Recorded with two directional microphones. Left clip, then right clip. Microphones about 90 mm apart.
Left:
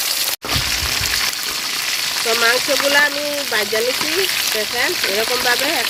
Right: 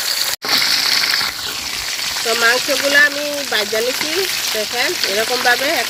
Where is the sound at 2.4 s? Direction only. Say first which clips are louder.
Right 2 dB; 35° right (ahead or behind).